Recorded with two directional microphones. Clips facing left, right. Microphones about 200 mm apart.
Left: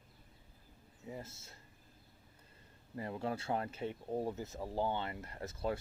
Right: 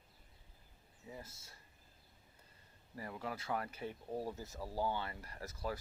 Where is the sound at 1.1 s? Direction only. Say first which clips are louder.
Left 5 dB; 25° left (ahead or behind).